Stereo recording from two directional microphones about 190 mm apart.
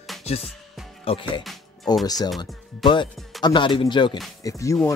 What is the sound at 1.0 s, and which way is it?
Speech, 25° left (ahead or behind).